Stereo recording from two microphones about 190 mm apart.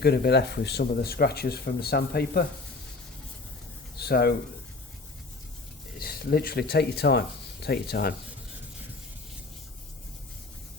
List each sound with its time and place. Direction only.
0.0 s speech: 55° left (ahead or behind)
3.9 s a sound: 60° left (ahead or behind)
6.0 s speech: 50° left (ahead or behind)